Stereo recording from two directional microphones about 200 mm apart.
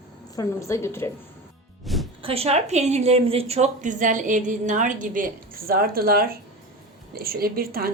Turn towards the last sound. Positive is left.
turn(degrees=-50)  # may be behind; listen again after turning